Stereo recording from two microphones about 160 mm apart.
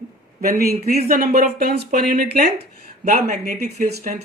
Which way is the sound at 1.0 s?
60° right (ahead or behind).